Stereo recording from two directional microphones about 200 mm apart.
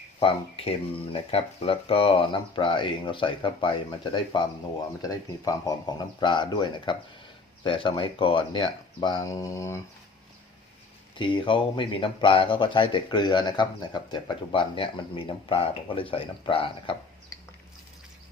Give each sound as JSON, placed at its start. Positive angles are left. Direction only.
{"t": 0.2, "sound": "speech", "side_deg": 30}
{"t": 11.2, "sound": "speech", "side_deg": 25}